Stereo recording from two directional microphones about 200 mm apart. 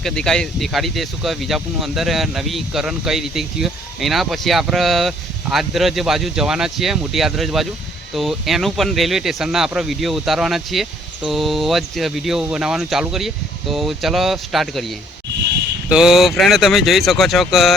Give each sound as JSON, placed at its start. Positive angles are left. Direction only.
{"t": 0.0, "sound": "speech", "side_deg": 5}